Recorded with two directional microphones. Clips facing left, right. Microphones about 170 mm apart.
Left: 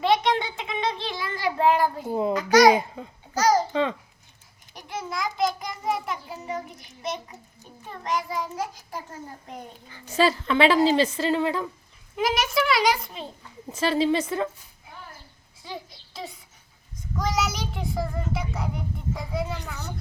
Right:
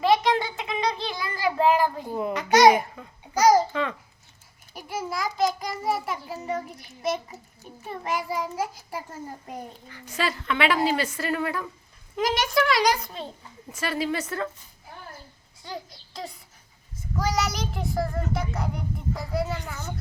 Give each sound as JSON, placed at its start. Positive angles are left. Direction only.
{"t": 0.0, "sound": "a sound", "side_deg": 0}
{"t": 2.0, "sound": "a woman's voice", "side_deg": 25}
{"t": 2.3, "sound": "babbling", "side_deg": -25}
{"t": 2.7, "sound": "babbling", "side_deg": 25}
{"t": 3.3, "sound": "babbling", "side_deg": -10}
{"t": 3.7, "sound": "babbling", "side_deg": 20}
{"t": 4.7, "sound": "a sound", "side_deg": -5}
{"t": 7.0, "sound": "a child's voice", "side_deg": -5}
{"t": 9.9, "sound": "a woman's voice", "side_deg": 30}
{"t": 12.1, "sound": "a child's voice", "side_deg": 5}
{"t": 13.7, "sound": "a woman's voice", "side_deg": 25}
{"t": 15.6, "sound": "a sound", "side_deg": 0}
{"t": 17.2, "sound": "a child's voice", "side_deg": 0}